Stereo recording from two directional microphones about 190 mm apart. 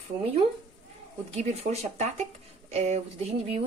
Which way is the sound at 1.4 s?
35° right (ahead or behind).